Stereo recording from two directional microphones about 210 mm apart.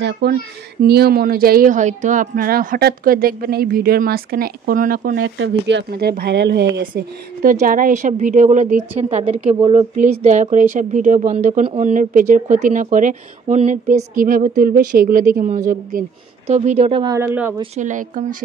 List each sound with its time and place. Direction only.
0.0 s speech: 50° right (ahead or behind)
5.2 s speech: 60° right (ahead or behind); by 17.6 s 10° right (ahead or behind)
17.7 s speech: 35° right (ahead or behind)